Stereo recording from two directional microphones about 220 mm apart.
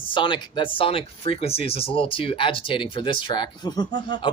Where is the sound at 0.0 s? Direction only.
20° left (ahead or behind).